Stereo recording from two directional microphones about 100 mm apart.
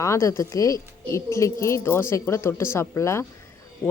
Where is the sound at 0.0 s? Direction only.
30° left (ahead or behind).